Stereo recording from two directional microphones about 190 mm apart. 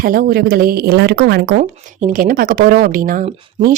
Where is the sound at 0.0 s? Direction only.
50° right (ahead or behind).